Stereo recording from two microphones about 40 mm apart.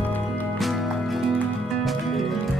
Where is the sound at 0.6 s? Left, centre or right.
Centre.